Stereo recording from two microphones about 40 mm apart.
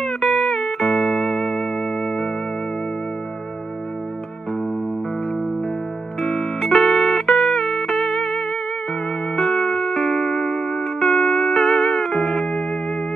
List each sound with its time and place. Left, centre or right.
0.0 s music: centre
6.6 s music: centre